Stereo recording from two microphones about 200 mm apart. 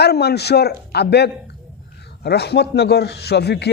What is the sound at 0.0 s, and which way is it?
A man's voice, 55° left (ahead or behind).